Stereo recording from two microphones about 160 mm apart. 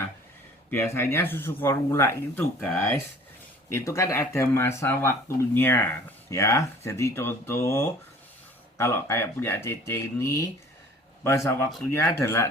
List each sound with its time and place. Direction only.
0.7 s speech: 15° left (ahead or behind)